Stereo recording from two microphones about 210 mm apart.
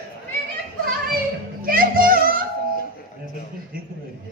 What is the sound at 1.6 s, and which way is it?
Music, 45° right (ahead or behind).